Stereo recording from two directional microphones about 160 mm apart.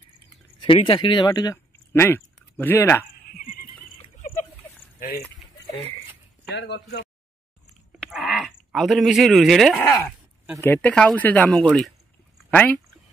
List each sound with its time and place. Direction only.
0.6 s speech: 35° left (ahead or behind)
1.9 s speech: 15° left (ahead or behind)
3.3 s a sound: 65° left (ahead or behind)
6.7 s speech: 90° left
8.0 s speech: centre (ahead or behind)